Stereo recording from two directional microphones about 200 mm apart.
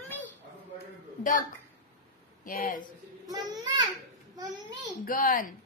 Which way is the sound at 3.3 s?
20° right (ahead or behind).